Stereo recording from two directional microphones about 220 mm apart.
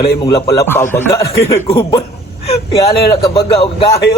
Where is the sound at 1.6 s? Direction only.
25° left (ahead or behind).